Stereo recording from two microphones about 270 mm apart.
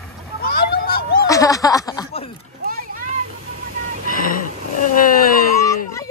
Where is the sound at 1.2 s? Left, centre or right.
Centre.